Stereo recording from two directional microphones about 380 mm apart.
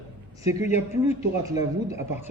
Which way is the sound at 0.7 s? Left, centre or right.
Centre.